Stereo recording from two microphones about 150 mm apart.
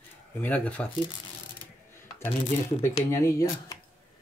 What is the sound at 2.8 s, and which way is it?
Speech, 20° left (ahead or behind).